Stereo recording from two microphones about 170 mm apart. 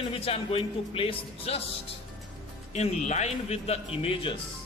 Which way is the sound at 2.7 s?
40° left (ahead or behind).